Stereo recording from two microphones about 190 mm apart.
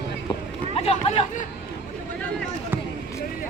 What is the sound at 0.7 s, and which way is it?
Chatter, 35° left (ahead or behind).